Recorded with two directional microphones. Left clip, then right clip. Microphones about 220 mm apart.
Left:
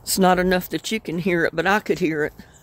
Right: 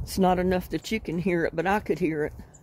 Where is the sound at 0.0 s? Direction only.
20° left (ahead or behind).